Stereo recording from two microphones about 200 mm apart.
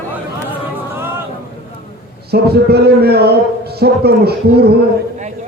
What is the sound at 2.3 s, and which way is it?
Speech, 55° right (ahead or behind).